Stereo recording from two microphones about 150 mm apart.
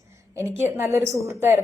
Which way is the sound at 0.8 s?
20° right (ahead or behind).